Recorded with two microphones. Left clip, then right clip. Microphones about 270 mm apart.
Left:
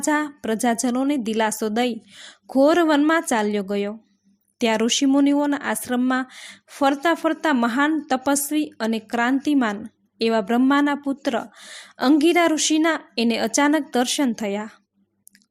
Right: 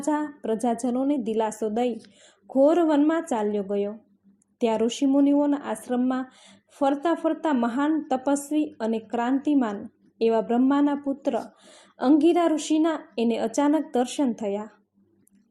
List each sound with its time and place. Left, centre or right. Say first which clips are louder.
0.0 s speech: left 4 dB; left